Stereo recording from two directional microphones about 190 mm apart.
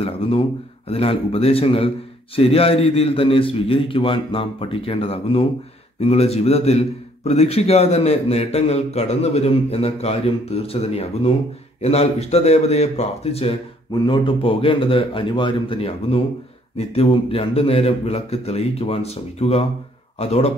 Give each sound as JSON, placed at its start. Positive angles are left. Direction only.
{"t": 0.0, "sound": "a man's voice", "side_deg": 30}